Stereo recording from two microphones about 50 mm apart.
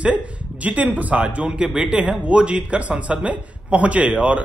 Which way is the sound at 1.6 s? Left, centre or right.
Centre.